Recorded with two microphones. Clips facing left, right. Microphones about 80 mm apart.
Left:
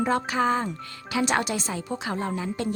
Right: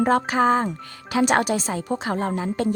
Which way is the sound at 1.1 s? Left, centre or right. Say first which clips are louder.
Right 5 dB; right.